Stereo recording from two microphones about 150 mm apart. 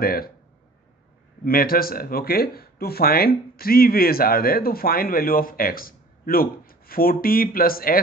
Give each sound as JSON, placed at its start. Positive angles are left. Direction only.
{"t": 0.0, "sound": "speech", "side_deg": 80}
{"t": 1.4, "sound": "speech", "side_deg": 75}